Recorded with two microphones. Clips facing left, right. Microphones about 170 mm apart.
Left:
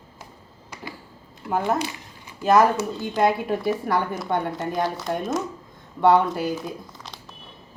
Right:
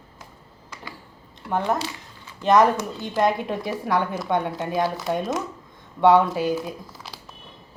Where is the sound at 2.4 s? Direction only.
5° left (ahead or behind).